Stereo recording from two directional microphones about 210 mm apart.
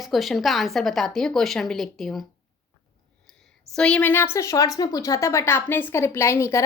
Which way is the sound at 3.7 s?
5° left (ahead or behind).